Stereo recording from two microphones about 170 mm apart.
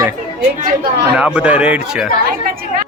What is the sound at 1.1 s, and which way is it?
Speech, 5° right (ahead or behind).